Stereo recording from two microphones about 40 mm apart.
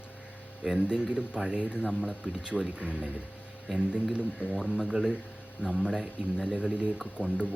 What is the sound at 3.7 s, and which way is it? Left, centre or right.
Speech, centre.